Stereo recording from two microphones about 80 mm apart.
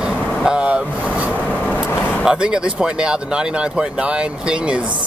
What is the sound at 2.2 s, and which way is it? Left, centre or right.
Speech, centre.